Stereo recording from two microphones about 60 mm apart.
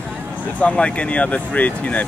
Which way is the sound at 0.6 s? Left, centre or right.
Centre.